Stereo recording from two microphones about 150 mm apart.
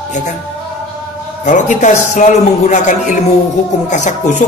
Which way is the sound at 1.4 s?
55° left (ahead or behind).